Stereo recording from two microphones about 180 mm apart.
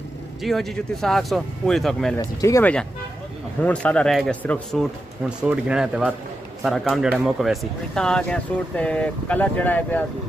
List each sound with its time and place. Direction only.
0.4 s speech: centre (ahead or behind)
2.1 s speech: 15° left (ahead or behind)
5.4 s speech: 5° right (ahead or behind)